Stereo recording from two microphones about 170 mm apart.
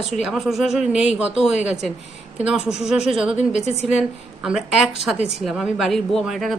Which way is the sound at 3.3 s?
40° left (ahead or behind).